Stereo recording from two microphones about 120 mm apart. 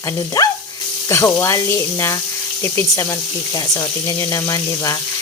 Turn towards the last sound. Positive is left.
turn(degrees=30)  # may be behind; listen again after turning